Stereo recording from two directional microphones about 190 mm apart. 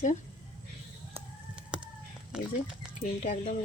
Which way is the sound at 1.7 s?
5° right (ahead or behind).